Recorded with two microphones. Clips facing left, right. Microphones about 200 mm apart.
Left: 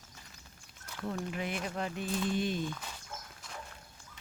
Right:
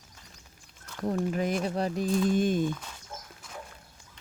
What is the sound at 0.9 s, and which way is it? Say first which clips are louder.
Speech: right 8 dB; 40° right (ahead or behind).